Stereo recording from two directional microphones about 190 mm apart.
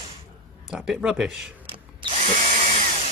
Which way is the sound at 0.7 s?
5° right (ahead or behind).